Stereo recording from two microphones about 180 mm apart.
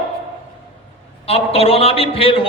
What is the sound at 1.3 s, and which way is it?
A man's voice, 35° left (ahead or behind).